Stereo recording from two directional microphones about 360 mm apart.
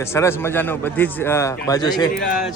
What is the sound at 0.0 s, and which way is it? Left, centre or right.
A man's voice, centre.